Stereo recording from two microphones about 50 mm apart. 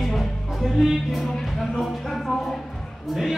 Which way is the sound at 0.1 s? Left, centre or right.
Centre.